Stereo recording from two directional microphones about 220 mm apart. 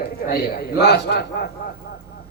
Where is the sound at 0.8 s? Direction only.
50° left (ahead or behind).